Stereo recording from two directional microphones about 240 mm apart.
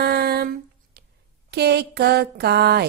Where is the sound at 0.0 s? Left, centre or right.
Right.